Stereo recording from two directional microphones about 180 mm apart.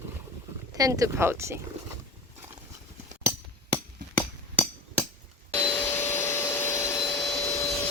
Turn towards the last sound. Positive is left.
turn(degrees=20)  # may be behind; listen again after turning